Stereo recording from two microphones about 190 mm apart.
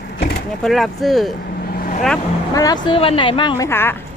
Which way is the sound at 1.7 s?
45° left (ahead or behind).